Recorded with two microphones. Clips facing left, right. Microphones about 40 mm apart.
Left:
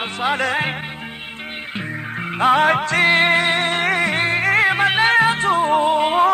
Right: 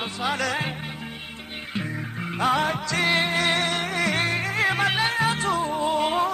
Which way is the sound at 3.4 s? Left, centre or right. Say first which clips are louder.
Left 5 dB; left.